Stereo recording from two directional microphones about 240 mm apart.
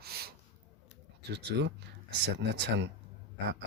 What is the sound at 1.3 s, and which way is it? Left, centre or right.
Speech, right.